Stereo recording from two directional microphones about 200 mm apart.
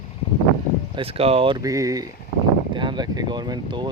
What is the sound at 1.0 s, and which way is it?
Speech, 30° right (ahead or behind).